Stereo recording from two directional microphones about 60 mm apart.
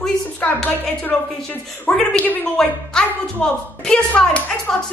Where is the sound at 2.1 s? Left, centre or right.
Left.